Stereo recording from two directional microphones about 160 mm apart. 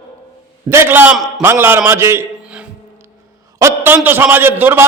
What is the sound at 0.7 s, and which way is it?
A man's voice, 15° right (ahead or behind).